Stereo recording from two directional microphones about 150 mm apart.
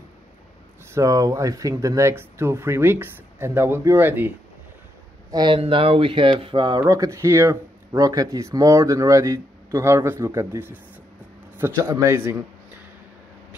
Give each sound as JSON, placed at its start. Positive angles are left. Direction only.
{"t": 0.9, "sound": "speech", "side_deg": -25}
{"t": 5.3, "sound": "speech", "side_deg": -30}